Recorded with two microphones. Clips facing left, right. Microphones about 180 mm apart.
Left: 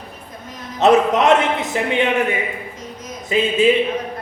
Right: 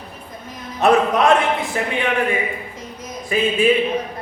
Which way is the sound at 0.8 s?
20° left (ahead or behind).